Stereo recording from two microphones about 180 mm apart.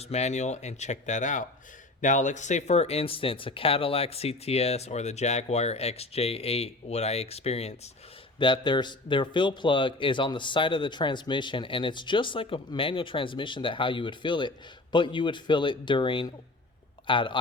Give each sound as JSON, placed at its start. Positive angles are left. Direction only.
{"t": 0.0, "sound": "a man's voice", "side_deg": 35}